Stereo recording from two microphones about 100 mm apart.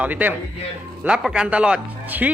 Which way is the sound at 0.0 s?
15° right (ahead or behind).